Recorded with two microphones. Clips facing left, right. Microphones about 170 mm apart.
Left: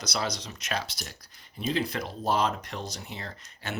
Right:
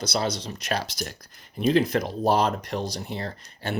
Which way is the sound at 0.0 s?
30° right (ahead or behind).